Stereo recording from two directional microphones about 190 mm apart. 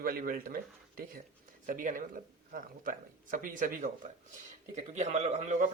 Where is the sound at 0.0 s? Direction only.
50° right (ahead or behind).